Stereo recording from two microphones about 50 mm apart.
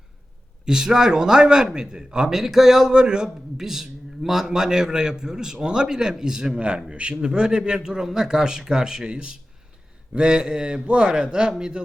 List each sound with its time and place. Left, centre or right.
0.6 s speech: centre